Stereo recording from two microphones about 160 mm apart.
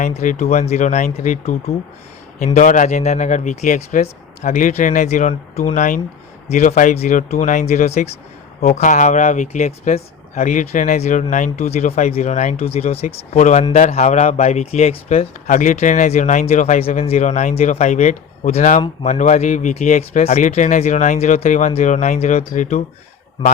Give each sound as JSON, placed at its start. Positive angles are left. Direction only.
{"t": 0.0, "sound": "speech", "side_deg": 50}
{"t": 15.4, "sound": "speech", "side_deg": 50}